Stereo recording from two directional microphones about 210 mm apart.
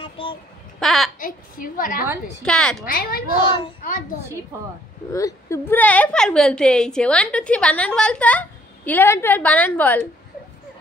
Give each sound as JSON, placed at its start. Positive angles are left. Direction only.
{"t": 0.0, "sound": "child singing", "side_deg": 25}
{"t": 0.7, "sound": "babbling", "side_deg": 0}
{"t": 1.2, "sound": "a woman's voice", "side_deg": 40}
{"t": 2.4, "sound": "a woman's voice", "side_deg": 0}
{"t": 2.8, "sound": "speech", "side_deg": 45}
{"t": 5.1, "sound": "a woman's voice", "side_deg": 15}